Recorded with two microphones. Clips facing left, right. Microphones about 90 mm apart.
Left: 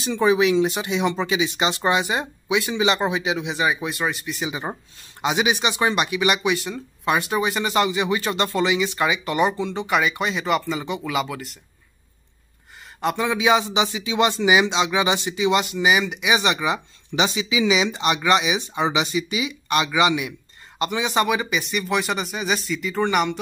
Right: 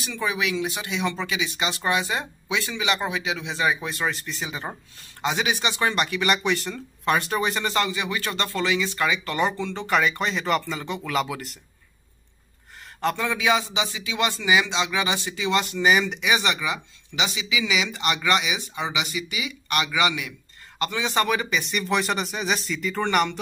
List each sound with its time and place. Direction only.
0.0 s speech: 30° left (ahead or behind); by 7.7 s 5° left (ahead or behind)
7.7 s speech: 20° left (ahead or behind); by 11.6 s centre (ahead or behind)
13.0 s speech: 15° left (ahead or behind)